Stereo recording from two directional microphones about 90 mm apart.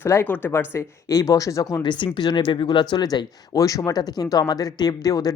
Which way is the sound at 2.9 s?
50° left (ahead or behind).